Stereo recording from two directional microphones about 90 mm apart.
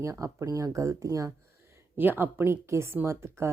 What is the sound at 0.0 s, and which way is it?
Speech, 35° right (ahead or behind).